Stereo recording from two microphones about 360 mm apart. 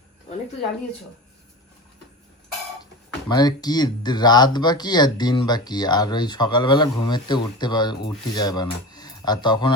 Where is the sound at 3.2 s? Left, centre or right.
Centre.